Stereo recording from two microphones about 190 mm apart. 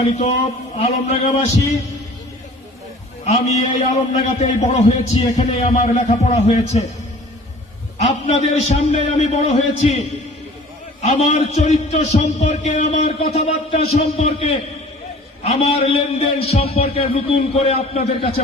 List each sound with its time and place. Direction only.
0.0 s a man's voice: 35° left (ahead or behind)
3.2 s a man's voice: 35° left (ahead or behind)
7.9 s a man's voice: 35° left (ahead or behind)
11.0 s a man's voice: 35° left (ahead or behind)